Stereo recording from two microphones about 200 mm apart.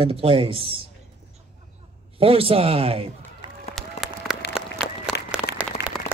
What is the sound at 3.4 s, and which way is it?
Run, 20° right (ahead or behind).